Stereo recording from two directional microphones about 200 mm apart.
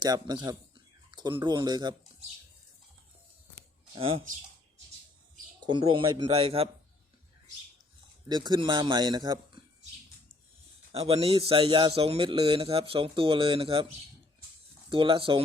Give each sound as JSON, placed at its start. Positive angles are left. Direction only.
{"t": 0.0, "sound": "a man's voice", "side_deg": -20}
{"t": 3.9, "sound": "a man's voice", "side_deg": -30}
{"t": 5.6, "sound": "a man's voice", "side_deg": -25}
{"t": 8.3, "sound": "a man's voice", "side_deg": -25}
{"t": 10.9, "sound": "a man's voice", "side_deg": -30}
{"t": 14.8, "sound": "a man's voice", "side_deg": -25}